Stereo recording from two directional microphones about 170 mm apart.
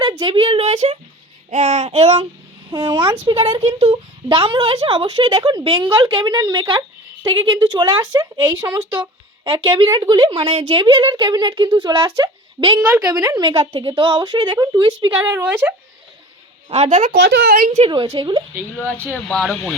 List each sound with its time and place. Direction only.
0.0 s a sound: 25° right (ahead or behind)
1.5 s child singing: 45° right (ahead or behind)
2.7 s speech: 30° right (ahead or behind)
16.6 s child singing: 40° right (ahead or behind)
17.1 s speech: 90° right
17.5 s a woman's voice: 55° right (ahead or behind)
17.7 s speech: 30° right (ahead or behind)
19.1 s speech: 5° left (ahead or behind)